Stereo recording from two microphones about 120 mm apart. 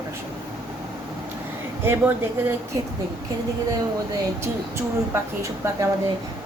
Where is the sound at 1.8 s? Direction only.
20° right (ahead or behind).